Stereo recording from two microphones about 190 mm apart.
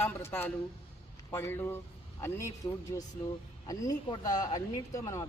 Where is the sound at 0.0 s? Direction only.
10° left (ahead or behind).